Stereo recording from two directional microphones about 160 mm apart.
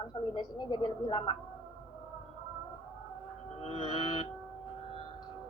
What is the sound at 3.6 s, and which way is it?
Speech, 35° left (ahead or behind).